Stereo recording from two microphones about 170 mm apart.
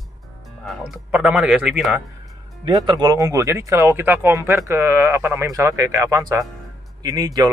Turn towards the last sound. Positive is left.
turn(degrees=-20)  # may be behind; listen again after turning